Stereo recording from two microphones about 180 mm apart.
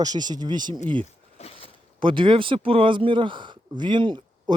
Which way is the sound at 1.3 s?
35° left (ahead or behind).